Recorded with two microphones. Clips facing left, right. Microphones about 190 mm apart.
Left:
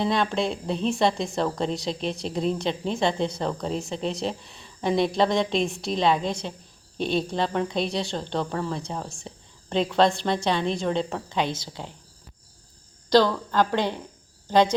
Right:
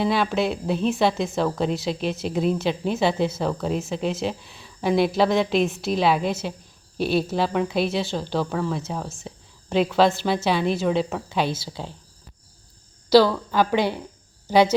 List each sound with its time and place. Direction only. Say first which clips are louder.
0.0 s a woman's voice: right 2 dB; 5° right (ahead or behind)
13.1 s speech: right 3 dB; 5° right (ahead or behind)